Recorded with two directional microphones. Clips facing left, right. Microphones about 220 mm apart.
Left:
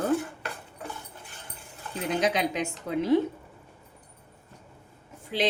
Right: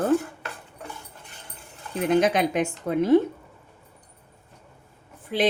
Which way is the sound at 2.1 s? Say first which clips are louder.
Right 6 dB; 55° right (ahead or behind).